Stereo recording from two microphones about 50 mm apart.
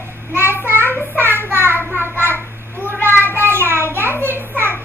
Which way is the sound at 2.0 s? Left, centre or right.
Right.